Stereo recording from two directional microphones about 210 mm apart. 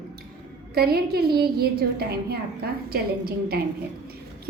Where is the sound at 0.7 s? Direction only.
50° right (ahead or behind).